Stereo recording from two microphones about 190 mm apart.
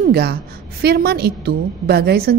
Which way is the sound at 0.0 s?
55° right (ahead or behind).